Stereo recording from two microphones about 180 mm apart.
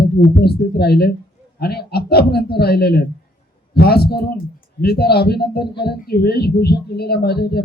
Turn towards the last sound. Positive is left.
turn(degrees=65)  # may be behind; listen again after turning